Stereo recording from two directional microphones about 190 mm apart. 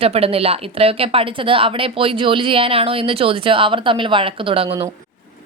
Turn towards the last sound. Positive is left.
turn(degrees=-30)  # may be behind; listen again after turning